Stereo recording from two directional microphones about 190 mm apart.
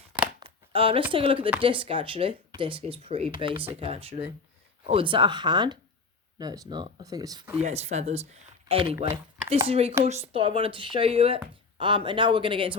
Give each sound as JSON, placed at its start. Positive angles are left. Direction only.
{"t": 0.3, "sound": "a sound", "side_deg": -25}
{"t": 1.1, "sound": "speech", "side_deg": -30}
{"t": 7.6, "sound": "speech", "side_deg": -35}